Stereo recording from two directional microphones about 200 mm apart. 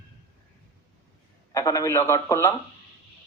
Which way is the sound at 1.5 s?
15° left (ahead or behind).